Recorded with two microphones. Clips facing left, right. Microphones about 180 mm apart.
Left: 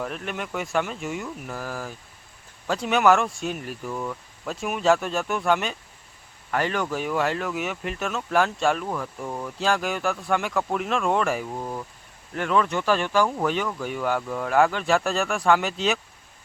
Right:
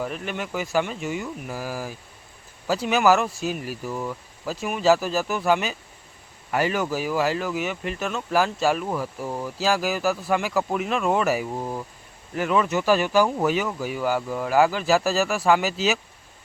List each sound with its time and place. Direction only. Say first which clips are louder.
0.0 s speech: right 1 dB; centre (ahead or behind)